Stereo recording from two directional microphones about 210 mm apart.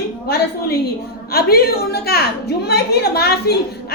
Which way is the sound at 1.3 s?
45° left (ahead or behind).